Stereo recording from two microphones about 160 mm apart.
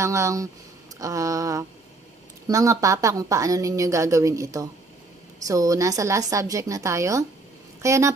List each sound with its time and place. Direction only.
0.0 s a woman's voice: 20° right (ahead or behind)